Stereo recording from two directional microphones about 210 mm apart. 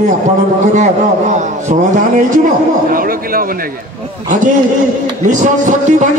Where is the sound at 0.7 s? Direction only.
35° right (ahead or behind).